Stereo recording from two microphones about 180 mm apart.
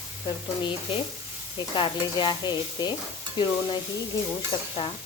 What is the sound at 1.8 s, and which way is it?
Stir, 25° left (ahead or behind).